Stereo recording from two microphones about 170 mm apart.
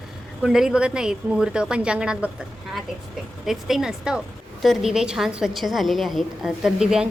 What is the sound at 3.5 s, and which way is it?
A woman's voice, centre (ahead or behind).